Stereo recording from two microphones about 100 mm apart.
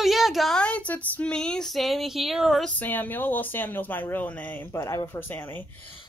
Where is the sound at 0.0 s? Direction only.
Centre (ahead or behind).